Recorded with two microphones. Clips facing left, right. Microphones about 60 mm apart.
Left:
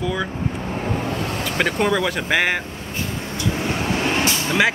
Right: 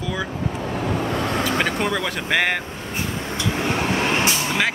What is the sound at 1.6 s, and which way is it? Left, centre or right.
Speech, centre.